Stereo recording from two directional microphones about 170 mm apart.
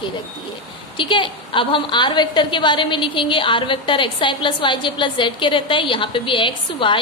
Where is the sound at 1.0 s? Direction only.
30° left (ahead or behind).